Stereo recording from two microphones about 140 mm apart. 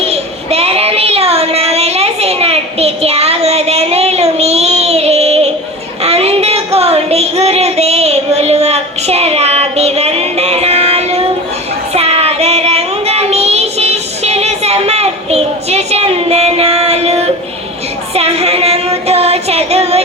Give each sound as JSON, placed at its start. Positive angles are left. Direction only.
{"t": 0.0, "sound": "child singing", "side_deg": -45}
{"t": 6.0, "sound": "a sound", "side_deg": -45}
{"t": 11.9, "sound": "child singing", "side_deg": -45}
{"t": 18.1, "sound": "female singing", "side_deg": -45}